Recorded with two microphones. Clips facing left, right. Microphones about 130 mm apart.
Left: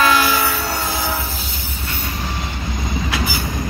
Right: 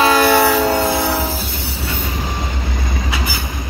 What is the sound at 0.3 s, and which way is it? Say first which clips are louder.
Train: right 8 dB; 80° right.